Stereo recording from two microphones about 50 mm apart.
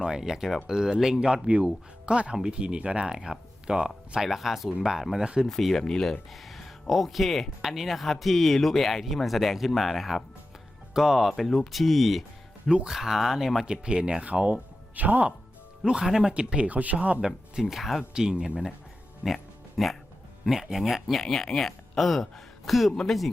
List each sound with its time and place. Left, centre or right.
0.0 s speech: centre
5.5 s speech: centre
6.3 s speech: centre
12.6 s speech: centre
13.7 s speech: centre; by 15.3 s right
15.8 s speech: centre; by 17.2 s right
17.2 s speech: centre
19.2 s music: centre
20.5 s speech: centre